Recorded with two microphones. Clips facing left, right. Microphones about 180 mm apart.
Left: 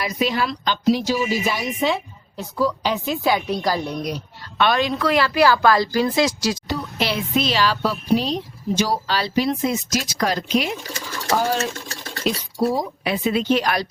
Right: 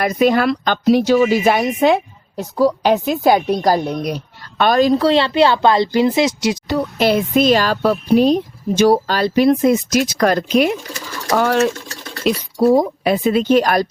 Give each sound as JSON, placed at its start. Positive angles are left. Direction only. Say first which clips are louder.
{"t": 0.0, "sound": "speech", "louder": "right 8 dB", "side_deg": -55}
{"t": 6.7, "sound": "speech", "louder": "right 8 dB", "side_deg": -50}
{"t": 11.3, "sound": "speech", "louder": "right 8 dB", "side_deg": -65}
{"t": 12.7, "sound": "speech", "louder": "right 9 dB", "side_deg": -50}